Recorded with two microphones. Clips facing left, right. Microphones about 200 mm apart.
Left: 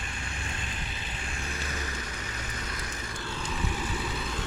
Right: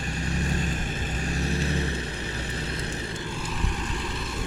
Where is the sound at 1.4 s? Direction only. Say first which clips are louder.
Right 10 dB; 35° right (ahead or behind).